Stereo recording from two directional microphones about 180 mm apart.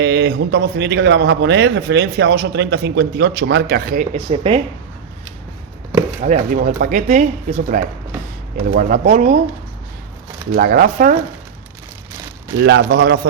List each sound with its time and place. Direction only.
0.0 s a man's voice: 70° right (ahead or behind); by 4.2 s 50° right (ahead or behind)
4.3 s speech: 30° right (ahead or behind)
6.2 s speech: 45° right (ahead or behind)
10.5 s speech: 50° right (ahead or behind)
12.5 s a man's voice: 70° right (ahead or behind)